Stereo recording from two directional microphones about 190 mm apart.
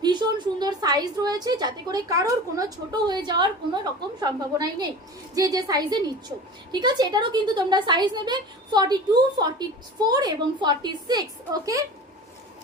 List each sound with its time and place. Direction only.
0.0 s a woman's voice: 20° right (ahead or behind)